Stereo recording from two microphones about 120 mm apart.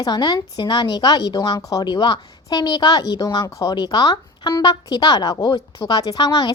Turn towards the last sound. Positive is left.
turn(degrees=35)  # may be behind; listen again after turning